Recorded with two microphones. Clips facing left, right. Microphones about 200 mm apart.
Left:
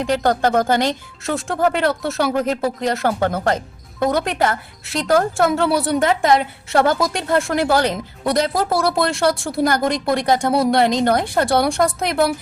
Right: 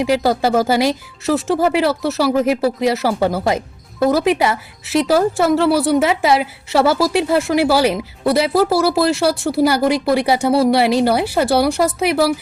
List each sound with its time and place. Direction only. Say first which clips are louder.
0.0 s a woman's voice: right 2 dB; 5° right (ahead or behind)